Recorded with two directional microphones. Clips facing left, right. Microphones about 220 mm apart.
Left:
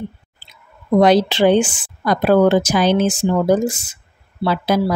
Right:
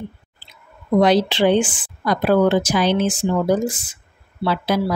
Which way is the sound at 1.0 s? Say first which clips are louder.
Left 3 dB; 45° left (ahead or behind).